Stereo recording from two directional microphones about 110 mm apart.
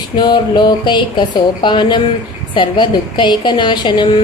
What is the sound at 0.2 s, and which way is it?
A woman's voice, 40° left (ahead or behind).